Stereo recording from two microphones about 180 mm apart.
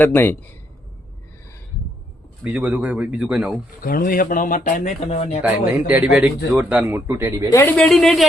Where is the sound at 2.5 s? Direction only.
10° right (ahead or behind).